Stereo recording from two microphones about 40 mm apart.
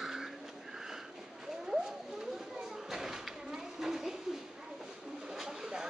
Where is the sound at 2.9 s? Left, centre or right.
Centre.